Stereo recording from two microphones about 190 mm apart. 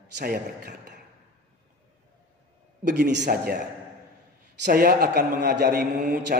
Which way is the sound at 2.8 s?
60° right (ahead or behind).